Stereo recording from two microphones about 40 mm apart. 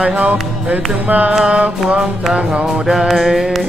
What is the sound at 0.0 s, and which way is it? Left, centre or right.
Speech, right.